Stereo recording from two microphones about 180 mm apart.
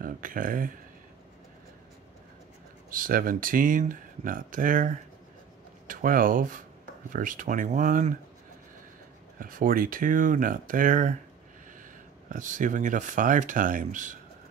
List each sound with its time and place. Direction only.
0.0 s speech: 50° right (ahead or behind)
2.9 s speech: 50° right (ahead or behind)
9.4 s speech: 50° right (ahead or behind)
12.3 s speech: 45° right (ahead or behind)